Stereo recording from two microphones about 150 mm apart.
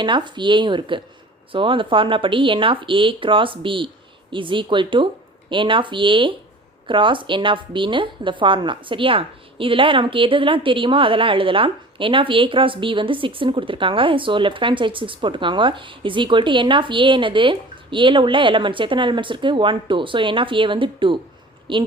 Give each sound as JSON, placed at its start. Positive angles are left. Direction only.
{"t": 0.0, "sound": "a woman's voice", "side_deg": -30}